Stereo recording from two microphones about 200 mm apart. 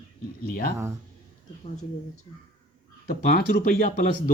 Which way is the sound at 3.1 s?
45° left (ahead or behind).